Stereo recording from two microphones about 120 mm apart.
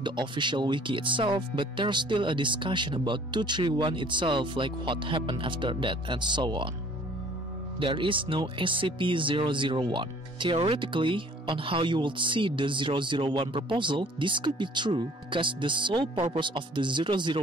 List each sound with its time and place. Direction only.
0.0 s speech: 40° right (ahead or behind)
7.8 s speech: 45° right (ahead or behind)